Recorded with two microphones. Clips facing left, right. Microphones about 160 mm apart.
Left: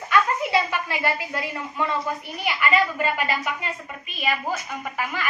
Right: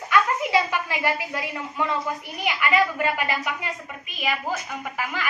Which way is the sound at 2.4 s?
15° right (ahead or behind).